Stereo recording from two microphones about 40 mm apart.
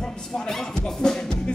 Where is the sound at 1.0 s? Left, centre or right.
Centre.